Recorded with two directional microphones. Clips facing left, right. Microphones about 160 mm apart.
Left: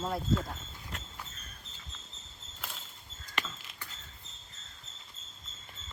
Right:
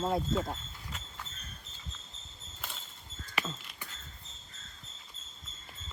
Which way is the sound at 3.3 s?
5° right (ahead or behind).